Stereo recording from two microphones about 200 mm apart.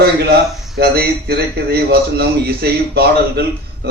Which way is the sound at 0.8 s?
50° right (ahead or behind).